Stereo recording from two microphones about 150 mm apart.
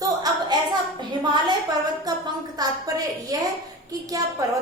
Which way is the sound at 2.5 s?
25° right (ahead or behind).